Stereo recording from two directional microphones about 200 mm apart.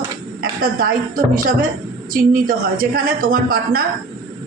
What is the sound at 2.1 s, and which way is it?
A man's voice, 45° right (ahead or behind).